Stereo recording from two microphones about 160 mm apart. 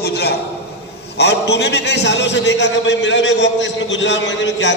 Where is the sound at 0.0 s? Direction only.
85° left.